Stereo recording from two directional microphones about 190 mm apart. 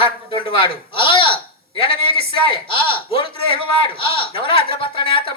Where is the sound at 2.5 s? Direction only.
25° left (ahead or behind).